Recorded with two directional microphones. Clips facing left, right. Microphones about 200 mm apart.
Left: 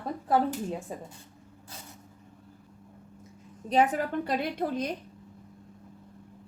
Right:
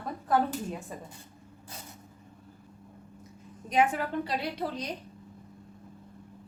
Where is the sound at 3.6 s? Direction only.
35° left (ahead or behind).